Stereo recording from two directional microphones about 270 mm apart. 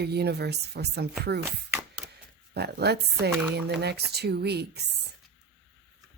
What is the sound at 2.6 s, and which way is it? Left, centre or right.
Speech, right.